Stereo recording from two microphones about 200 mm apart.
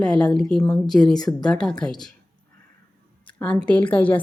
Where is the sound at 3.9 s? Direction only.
10° left (ahead or behind).